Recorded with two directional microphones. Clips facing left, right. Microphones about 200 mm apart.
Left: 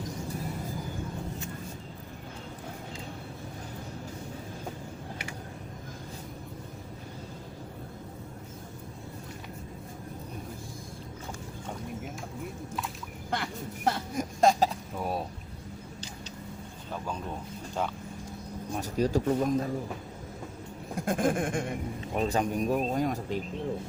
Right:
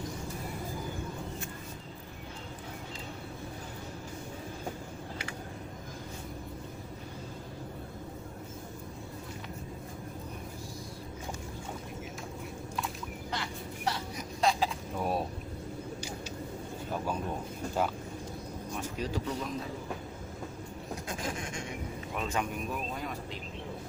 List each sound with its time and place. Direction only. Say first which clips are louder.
13.3 s vehicle: left 6 dB; 55° left (ahead or behind)
14.9 s a sound: right 1 dB; centre (ahead or behind)
17.8 s vehicle: right 1 dB; 5° right (ahead or behind)
18.7 s speech: left 8 dB; 40° left (ahead or behind)
20.9 s a sound: left 10 dB; 55° left (ahead or behind)
22.1 s speech: left 6 dB; 35° left (ahead or behind)